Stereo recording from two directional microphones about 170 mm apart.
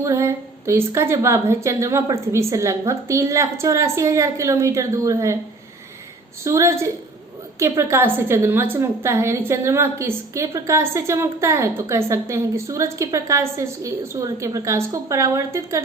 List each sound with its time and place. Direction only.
0.0 s a woman's voice: 15° right (ahead or behind)
6.4 s a woman's voice: 15° right (ahead or behind)